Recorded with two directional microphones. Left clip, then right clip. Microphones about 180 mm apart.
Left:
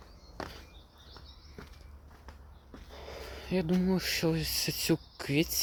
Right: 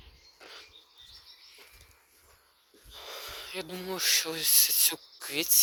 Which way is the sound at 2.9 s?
15° left (ahead or behind).